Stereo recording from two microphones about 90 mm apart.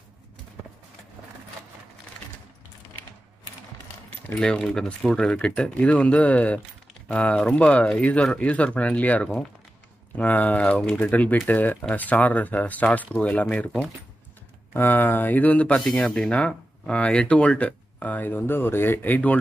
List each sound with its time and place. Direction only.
4.3 s speech: 10° left (ahead or behind)
14.7 s speech: 25° left (ahead or behind)